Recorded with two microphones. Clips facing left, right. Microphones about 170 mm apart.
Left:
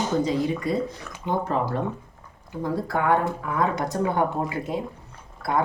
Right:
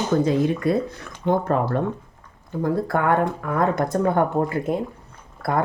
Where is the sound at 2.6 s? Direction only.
55° right (ahead or behind).